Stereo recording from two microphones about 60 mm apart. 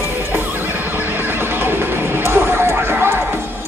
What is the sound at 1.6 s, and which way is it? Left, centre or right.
Music, right.